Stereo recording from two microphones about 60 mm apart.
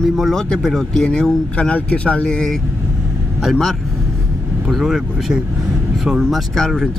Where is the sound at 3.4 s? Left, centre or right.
Centre.